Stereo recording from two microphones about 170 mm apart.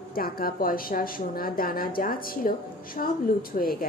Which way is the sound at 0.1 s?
60° left (ahead or behind).